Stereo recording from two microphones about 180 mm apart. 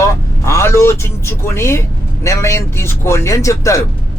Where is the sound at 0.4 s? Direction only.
15° left (ahead or behind).